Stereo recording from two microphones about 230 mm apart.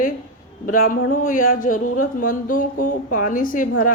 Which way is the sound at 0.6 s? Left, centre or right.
Left.